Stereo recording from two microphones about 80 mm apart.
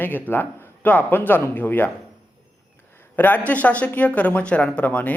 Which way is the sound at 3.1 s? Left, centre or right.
Left.